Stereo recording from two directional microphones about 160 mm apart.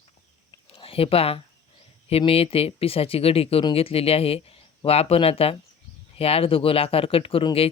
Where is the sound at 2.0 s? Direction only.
35° left (ahead or behind).